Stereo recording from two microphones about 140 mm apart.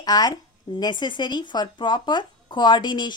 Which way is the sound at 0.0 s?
30° left (ahead or behind).